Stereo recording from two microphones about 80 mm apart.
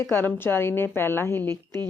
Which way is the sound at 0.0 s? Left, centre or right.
Left.